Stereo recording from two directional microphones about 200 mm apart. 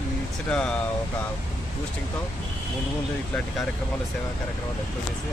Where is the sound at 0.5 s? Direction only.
5° left (ahead or behind).